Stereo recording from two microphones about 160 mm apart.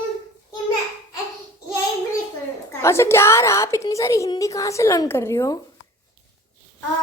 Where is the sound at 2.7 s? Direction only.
15° left (ahead or behind).